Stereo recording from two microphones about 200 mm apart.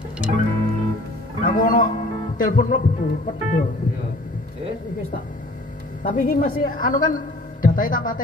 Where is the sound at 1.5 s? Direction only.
40° left (ahead or behind).